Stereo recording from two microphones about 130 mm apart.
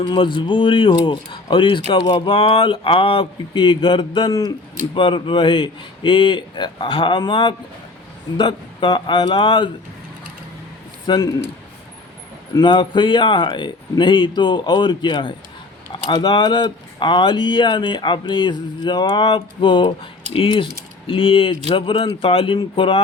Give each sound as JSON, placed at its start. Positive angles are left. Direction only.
{"t": 0.0, "sound": "speech", "side_deg": 40}
{"t": 4.3, "sound": "speech", "side_deg": 25}
{"t": 4.9, "sound": "speech", "side_deg": 40}
{"t": 11.1, "sound": "speech", "side_deg": 35}
{"t": 12.6, "sound": "speech", "side_deg": 40}